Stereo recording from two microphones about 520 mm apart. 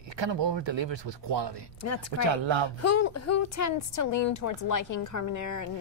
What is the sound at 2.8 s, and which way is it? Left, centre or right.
A woman's voice, left.